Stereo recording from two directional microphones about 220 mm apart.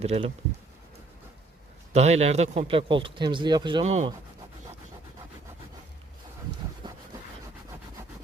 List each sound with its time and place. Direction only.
0.0 s speech: 30° right (ahead or behind)
1.9 s speech: 30° right (ahead or behind)
6.8 s a sound: 20° right (ahead or behind)